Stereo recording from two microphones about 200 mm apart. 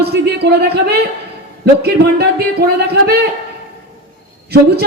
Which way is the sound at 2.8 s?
50° right (ahead or behind).